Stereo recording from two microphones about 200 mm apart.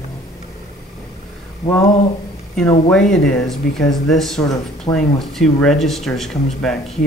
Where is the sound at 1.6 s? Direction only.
35° left (ahead or behind).